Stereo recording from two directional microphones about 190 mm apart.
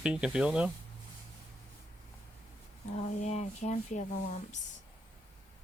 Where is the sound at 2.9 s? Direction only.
35° left (ahead or behind).